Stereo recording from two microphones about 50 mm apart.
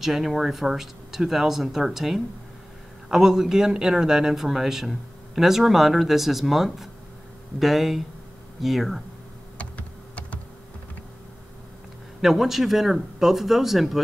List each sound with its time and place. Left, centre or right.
0.0 s a man's voice: centre
9.6 s computer keyboard: left
12.2 s speech: centre